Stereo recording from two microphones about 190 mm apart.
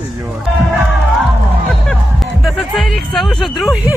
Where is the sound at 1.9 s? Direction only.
Centre (ahead or behind).